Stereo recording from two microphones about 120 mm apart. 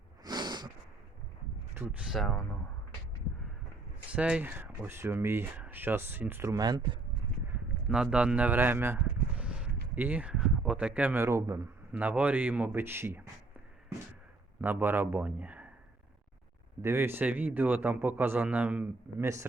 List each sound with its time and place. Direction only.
0.3 s snort: 35° right (ahead or behind)
1.7 s speech: 15° right (ahead or behind)
2.0 s speech: centre (ahead or behind)
4.1 s speech: 10° right (ahead or behind)
6.6 s speech: 35° right (ahead or behind)
7.9 s speech: 5° right (ahead or behind); by 11.7 s 25° right (ahead or behind)
11.9 s speech: 10° right (ahead or behind)
14.6 s speech: 15° right (ahead or behind)
16.8 s speech: 20° right (ahead or behind)